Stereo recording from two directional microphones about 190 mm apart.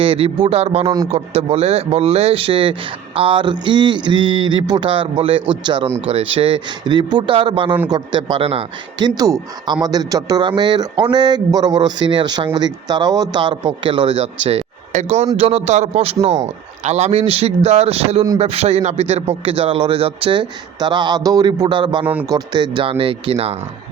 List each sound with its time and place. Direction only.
0.0 s a man's voice: 30° right (ahead or behind)
22.0 s a man's voice: 10° right (ahead or behind)
22.3 s speech: 20° right (ahead or behind)